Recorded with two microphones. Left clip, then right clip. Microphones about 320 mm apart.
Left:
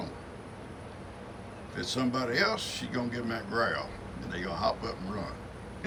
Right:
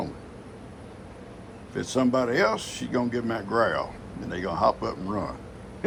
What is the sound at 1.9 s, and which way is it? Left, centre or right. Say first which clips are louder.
Speech: right 7 dB; centre.